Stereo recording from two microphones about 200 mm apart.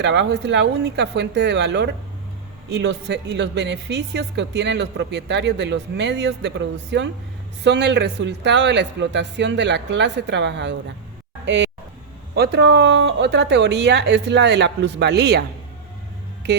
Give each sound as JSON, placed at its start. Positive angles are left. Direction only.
{"t": 0.0, "sound": "a woman's voice", "side_deg": -60}